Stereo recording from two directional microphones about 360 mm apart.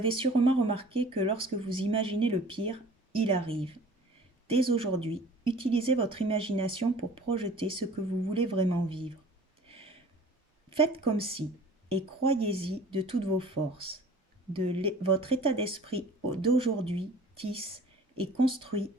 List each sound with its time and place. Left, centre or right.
0.0 s speech: centre
9.6 s a sound: centre
10.7 s speech: centre